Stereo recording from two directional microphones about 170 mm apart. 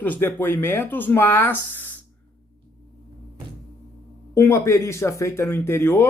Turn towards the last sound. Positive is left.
turn(degrees=15)  # may be behind; listen again after turning